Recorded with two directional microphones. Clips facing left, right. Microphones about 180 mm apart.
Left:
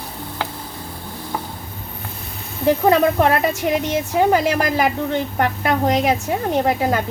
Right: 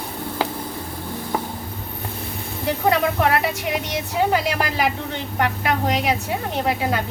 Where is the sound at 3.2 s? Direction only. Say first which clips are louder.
Left 3 dB; 40° left (ahead or behind).